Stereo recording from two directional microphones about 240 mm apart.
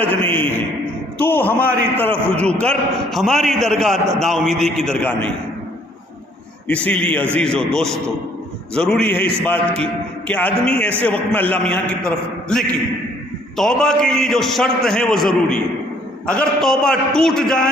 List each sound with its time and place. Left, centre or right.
1.2 s a man's voice: centre
3.9 s a man's voice: right
4.2 s a man's voice: centre
6.7 s a man's voice: centre